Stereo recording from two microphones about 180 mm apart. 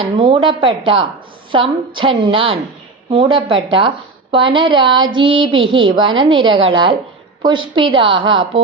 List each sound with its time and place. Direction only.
0.0 s a woman's voice: 30° right (ahead or behind)